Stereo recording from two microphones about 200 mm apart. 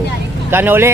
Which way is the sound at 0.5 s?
10° right (ahead or behind).